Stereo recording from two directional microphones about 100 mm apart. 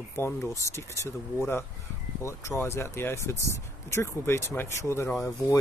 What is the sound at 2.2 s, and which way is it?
Speech, 25° left (ahead or behind).